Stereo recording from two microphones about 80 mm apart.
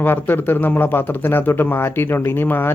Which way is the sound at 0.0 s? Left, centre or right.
Left.